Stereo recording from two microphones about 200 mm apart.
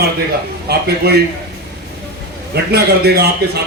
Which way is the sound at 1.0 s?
55° right (ahead or behind).